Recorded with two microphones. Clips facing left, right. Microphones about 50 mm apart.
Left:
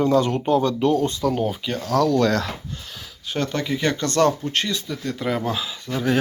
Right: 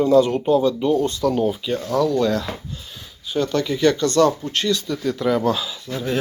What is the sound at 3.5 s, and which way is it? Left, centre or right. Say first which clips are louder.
Speech: right 6 dB; left.